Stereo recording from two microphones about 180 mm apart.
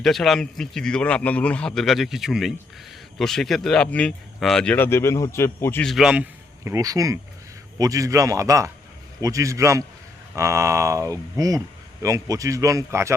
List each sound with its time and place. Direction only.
0.0 s a man's voice: centre (ahead or behind)
5.9 s a man's voice: 5° right (ahead or behind)
6.7 s speech: 20° right (ahead or behind)